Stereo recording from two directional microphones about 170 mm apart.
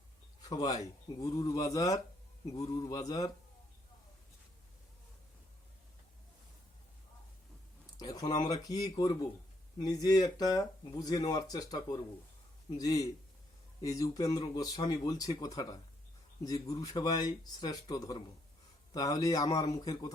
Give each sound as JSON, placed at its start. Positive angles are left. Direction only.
{"t": 0.4, "sound": "speech", "side_deg": 25}
{"t": 7.9, "sound": "speech", "side_deg": 20}